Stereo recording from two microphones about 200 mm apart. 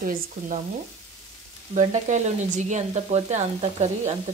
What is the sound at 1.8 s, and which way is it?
Frying, 35° right (ahead or behind).